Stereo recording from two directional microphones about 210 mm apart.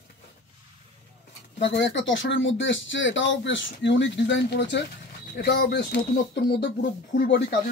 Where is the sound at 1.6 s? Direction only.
55° left (ahead or behind).